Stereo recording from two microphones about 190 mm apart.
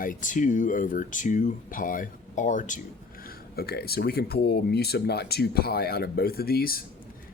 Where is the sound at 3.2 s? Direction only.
50° left (ahead or behind).